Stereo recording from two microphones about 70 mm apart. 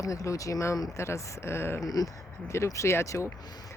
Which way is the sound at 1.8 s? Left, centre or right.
Left.